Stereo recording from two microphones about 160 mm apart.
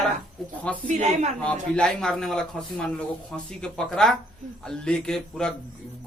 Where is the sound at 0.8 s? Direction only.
45° right (ahead or behind).